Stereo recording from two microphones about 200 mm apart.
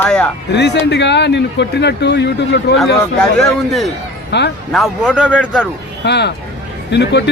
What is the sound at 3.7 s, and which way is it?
Speech, centre (ahead or behind).